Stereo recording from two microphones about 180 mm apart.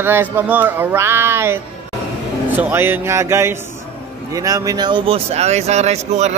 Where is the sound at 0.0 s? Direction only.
10° right (ahead or behind).